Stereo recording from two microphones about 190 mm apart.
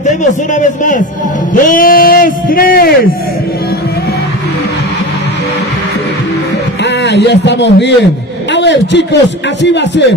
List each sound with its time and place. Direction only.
0.0 s a man's voice: 40° left (ahead or behind)
6.8 s a man's voice: 65° left (ahead or behind)